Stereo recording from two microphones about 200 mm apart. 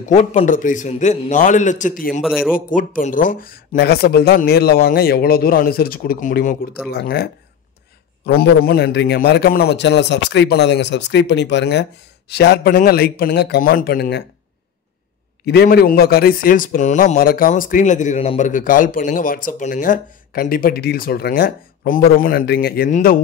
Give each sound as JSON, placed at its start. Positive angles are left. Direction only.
{"t": 0.1, "sound": "a man's voice", "side_deg": 35}
{"t": 2.2, "sound": "speech", "side_deg": -5}
{"t": 2.5, "sound": "a man's voice", "side_deg": 45}
{"t": 8.3, "sound": "a man's voice", "side_deg": 50}
{"t": 15.4, "sound": "a man's voice", "side_deg": 55}